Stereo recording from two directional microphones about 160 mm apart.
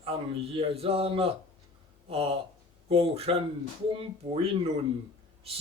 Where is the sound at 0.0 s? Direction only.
35° right (ahead or behind).